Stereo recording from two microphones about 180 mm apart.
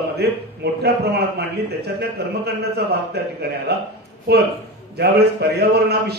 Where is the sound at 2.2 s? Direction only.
65° right (ahead or behind).